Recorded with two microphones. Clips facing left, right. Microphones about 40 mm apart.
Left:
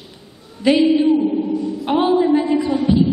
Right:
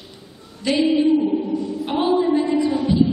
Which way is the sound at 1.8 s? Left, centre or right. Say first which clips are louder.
Left 4 dB; centre.